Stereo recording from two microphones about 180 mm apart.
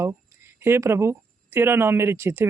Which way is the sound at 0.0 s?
15° right (ahead or behind).